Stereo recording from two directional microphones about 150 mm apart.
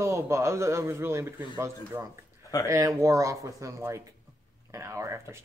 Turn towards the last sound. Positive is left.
turn(degrees=-20)  # may be behind; listen again after turning